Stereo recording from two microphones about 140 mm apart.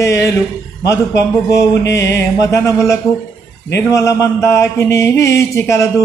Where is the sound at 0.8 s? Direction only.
20° left (ahead or behind).